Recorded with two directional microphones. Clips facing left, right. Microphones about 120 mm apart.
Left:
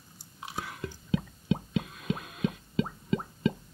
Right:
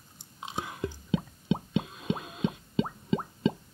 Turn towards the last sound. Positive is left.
turn(degrees=-25)  # may be behind; listen again after turning